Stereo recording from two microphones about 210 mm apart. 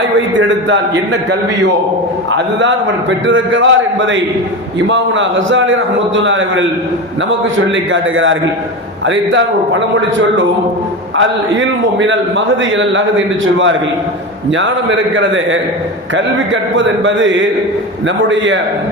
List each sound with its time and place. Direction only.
0.0 s a man's voice: 60° right (ahead or behind)